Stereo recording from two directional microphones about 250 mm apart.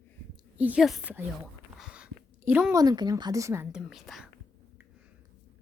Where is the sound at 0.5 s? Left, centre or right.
Centre.